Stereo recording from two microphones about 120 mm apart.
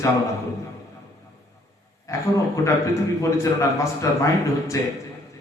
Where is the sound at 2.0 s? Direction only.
25° left (ahead or behind).